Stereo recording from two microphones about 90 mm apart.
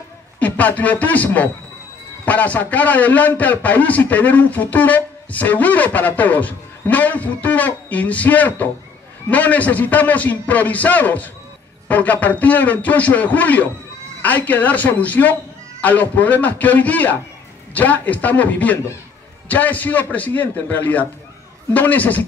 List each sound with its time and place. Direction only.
0.4 s a man's voice: 15° left (ahead or behind)